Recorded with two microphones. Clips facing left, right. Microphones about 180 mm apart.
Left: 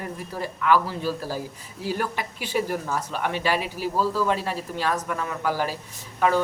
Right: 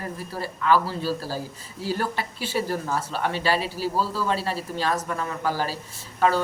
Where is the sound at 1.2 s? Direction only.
15° left (ahead or behind).